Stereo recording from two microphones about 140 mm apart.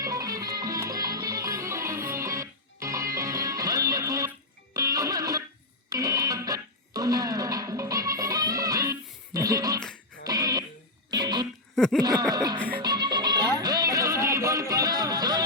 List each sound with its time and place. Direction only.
0.0 s music: 25° right (ahead or behind)
11.1 s a sound: 30° right (ahead or behind)
11.7 s laughter: 5° left (ahead or behind)
12.3 s music: 30° right (ahead or behind)